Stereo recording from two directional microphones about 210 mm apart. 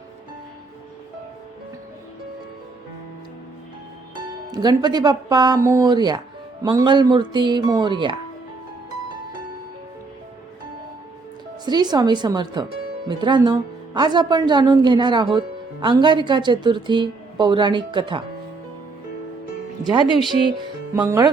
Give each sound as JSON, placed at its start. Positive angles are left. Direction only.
{"t": 4.5, "sound": "speech", "side_deg": -20}
{"t": 11.6, "sound": "speech", "side_deg": -20}
{"t": 19.8, "sound": "speech", "side_deg": -20}